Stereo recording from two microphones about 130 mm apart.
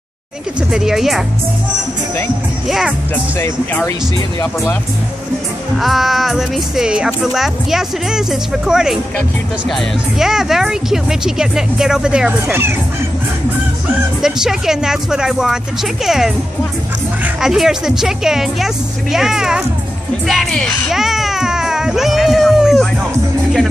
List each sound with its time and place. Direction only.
0.7 s speech: 5° right (ahead or behind)
3.3 s speech: 20° left (ahead or behind)
5.8 s speech: centre (ahead or behind)
14.2 s speech: 5° right (ahead or behind)
17.2 s speech: 5° right (ahead or behind)